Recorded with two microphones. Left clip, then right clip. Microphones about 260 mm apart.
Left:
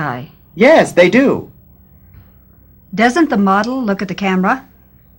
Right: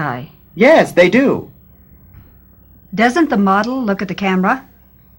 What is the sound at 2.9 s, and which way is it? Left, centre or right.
Speech, right.